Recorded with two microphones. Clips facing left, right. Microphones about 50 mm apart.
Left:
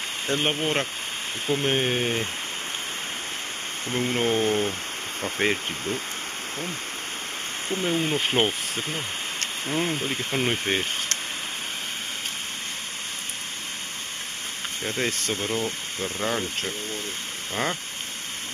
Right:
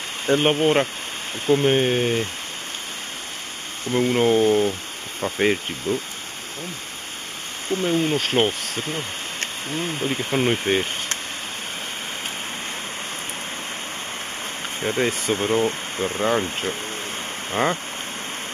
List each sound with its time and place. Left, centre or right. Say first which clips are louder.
0.3 s speech: right 7 dB; centre
3.9 s speech: right 6 dB; centre
7.7 s speech: right 4 dB; centre
10.1 s speech: right 4 dB; centre
15.0 s speech: right 5 dB; centre
15.3 s speech: right 7 dB; right